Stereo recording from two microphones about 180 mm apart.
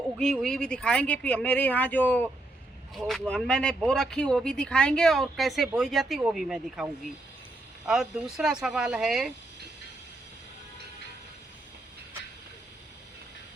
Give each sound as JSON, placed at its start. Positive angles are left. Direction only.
{"t": 0.2, "sound": "speech", "side_deg": 0}
{"t": 7.9, "sound": "speech", "side_deg": -5}